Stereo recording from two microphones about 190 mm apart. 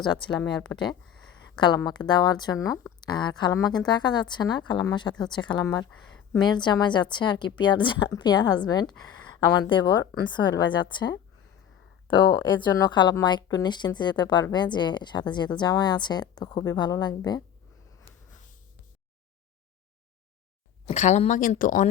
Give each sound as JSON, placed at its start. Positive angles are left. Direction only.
{"t": 0.1, "sound": "speech", "side_deg": 25}
{"t": 20.8, "sound": "speech", "side_deg": 35}